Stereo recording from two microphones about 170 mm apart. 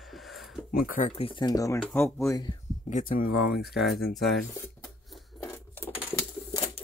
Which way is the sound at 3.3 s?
Centre (ahead or behind).